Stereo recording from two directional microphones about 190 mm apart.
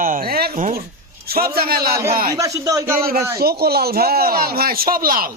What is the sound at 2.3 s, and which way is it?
Speech, 20° right (ahead or behind).